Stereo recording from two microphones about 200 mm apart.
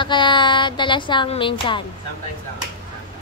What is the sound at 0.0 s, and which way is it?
Speech, 25° left (ahead or behind).